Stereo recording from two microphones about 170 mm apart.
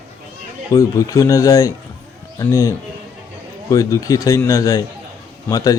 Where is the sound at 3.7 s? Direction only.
20° left (ahead or behind).